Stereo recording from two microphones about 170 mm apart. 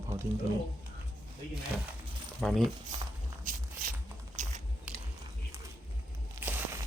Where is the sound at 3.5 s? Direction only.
55° right (ahead or behind).